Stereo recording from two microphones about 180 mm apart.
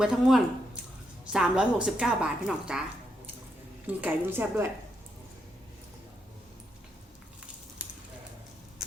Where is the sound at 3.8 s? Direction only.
10° right (ahead or behind).